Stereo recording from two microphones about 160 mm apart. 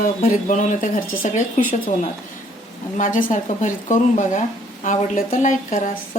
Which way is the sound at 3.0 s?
50° left (ahead or behind).